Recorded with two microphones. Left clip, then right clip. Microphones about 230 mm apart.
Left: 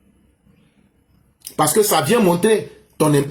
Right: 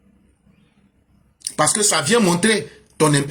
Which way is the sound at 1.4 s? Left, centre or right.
Right.